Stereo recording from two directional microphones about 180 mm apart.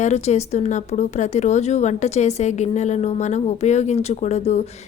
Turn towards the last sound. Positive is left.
turn(degrees=35)  # may be behind; listen again after turning